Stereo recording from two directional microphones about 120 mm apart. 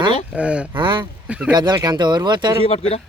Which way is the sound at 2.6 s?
55° left (ahead or behind).